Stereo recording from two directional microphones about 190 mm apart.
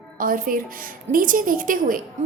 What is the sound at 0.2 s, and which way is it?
A woman's voice, 45° right (ahead or behind).